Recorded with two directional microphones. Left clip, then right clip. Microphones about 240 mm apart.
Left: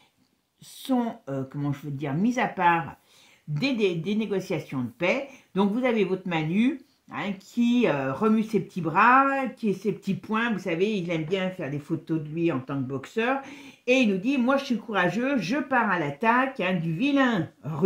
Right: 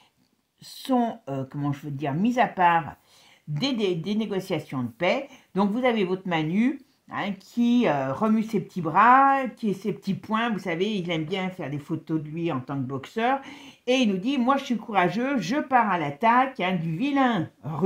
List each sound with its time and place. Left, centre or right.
0.7 s speech: right